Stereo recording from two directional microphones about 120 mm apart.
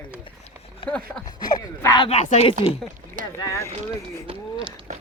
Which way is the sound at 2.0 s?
70° left (ahead or behind).